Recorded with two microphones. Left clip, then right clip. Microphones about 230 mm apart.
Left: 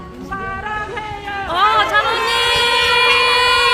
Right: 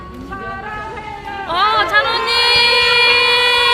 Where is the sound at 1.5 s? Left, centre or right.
Centre.